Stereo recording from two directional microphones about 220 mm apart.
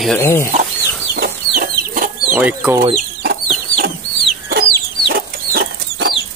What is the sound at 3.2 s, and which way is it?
Chicken, 45° right (ahead or behind).